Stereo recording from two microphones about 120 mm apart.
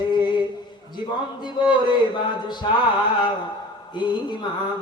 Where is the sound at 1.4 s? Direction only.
40° left (ahead or behind).